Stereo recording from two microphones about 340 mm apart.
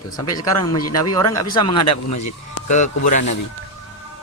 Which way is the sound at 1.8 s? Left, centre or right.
Left.